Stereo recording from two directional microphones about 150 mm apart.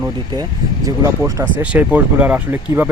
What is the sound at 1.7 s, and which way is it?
Speech, 10° right (ahead or behind).